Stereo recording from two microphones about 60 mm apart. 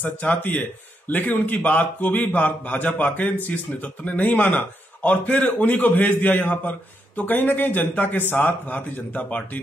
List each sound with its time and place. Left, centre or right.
0.0 s speech: left